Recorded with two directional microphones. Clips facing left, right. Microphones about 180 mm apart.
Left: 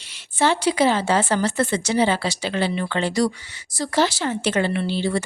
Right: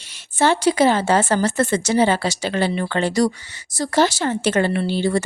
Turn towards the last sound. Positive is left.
turn(degrees=-45)  # may be behind; listen again after turning